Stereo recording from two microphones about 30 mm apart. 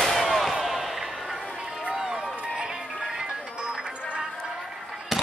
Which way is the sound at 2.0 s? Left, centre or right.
Centre.